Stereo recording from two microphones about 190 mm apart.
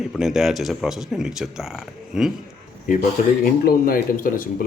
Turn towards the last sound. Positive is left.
turn(degrees=45)  # may be behind; listen again after turning